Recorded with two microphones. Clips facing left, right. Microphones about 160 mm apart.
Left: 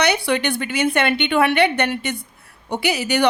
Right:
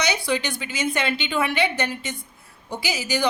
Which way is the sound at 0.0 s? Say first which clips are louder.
Left 5 dB; 65° left (ahead or behind).